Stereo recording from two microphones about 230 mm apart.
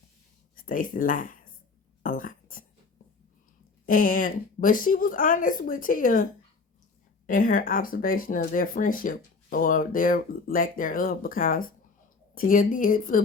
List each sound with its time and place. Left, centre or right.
0.5 s speech: left
3.8 s speech: left
7.3 s speech: left